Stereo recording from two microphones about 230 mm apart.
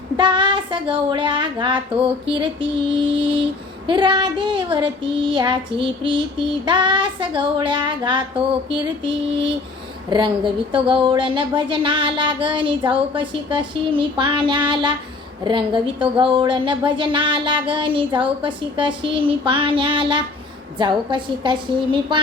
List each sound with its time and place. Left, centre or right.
0.2 s speech: right